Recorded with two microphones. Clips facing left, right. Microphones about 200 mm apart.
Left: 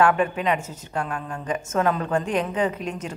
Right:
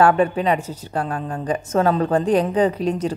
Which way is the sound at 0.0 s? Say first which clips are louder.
Right 4 dB; 35° right (ahead or behind).